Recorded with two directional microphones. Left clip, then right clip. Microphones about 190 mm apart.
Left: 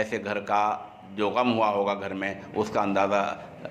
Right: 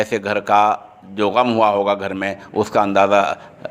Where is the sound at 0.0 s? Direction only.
40° right (ahead or behind).